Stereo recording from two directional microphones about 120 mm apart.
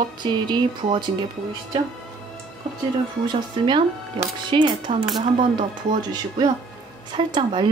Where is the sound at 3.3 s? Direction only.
45° right (ahead or behind).